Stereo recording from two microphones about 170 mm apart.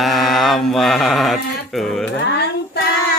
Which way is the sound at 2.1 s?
75° left (ahead or behind).